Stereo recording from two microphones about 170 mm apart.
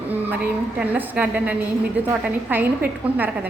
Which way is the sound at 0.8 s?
10° right (ahead or behind).